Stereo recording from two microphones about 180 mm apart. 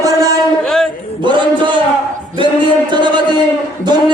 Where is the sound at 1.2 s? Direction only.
25° right (ahead or behind).